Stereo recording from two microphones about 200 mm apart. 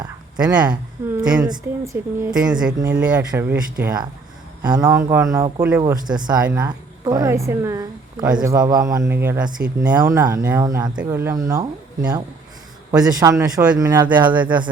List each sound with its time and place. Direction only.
0.3 s speech: 5° right (ahead or behind)
1.4 s a woman's voice: 15° right (ahead or behind)
2.3 s a woman's voice: 5° right (ahead or behind)
4.6 s a woman's voice: 20° right (ahead or behind)
9.9 s a woman's voice: 15° right (ahead or behind)
13.1 s a woman's voice: 15° right (ahead or behind)